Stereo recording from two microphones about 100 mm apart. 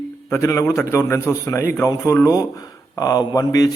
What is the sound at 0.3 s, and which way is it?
A man's voice, 25° left (ahead or behind).